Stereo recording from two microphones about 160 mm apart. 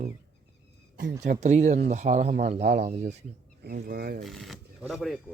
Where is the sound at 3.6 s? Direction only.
70° right (ahead or behind).